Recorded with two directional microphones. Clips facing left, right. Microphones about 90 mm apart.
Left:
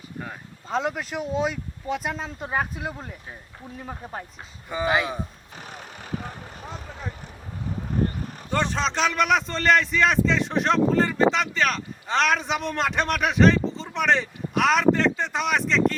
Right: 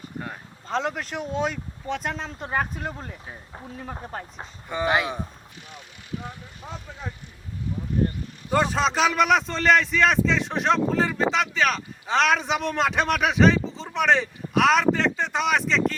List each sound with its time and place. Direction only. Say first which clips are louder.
0.2 s speech: even; centre (ahead or behind)
5.6 s vehicle: left 7 dB; 45° left (ahead or behind)
8.4 s speech: right 3 dB; 5° right (ahead or behind)